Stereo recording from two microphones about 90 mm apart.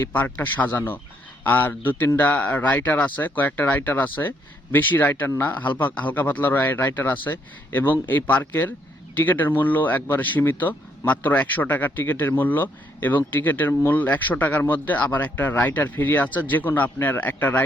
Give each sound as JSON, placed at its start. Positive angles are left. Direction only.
{"t": 0.0, "sound": "speech", "side_deg": 20}